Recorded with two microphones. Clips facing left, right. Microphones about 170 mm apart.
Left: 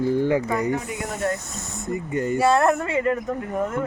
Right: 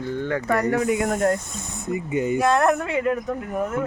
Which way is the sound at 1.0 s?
50° right (ahead or behind).